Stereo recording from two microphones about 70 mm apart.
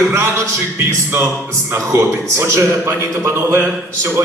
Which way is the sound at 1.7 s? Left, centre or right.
Right.